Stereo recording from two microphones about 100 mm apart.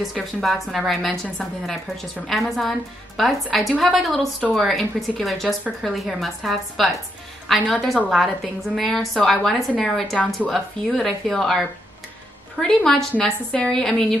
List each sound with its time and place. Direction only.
0.0 s a woman's voice: centre (ahead or behind)